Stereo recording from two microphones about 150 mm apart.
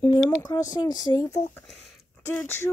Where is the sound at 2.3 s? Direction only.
15° left (ahead or behind).